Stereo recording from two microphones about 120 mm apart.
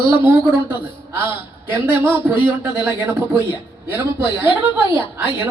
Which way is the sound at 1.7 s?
20° right (ahead or behind).